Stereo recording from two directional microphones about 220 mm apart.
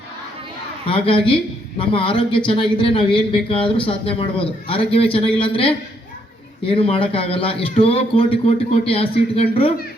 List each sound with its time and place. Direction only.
0.9 s speech: 25° left (ahead or behind)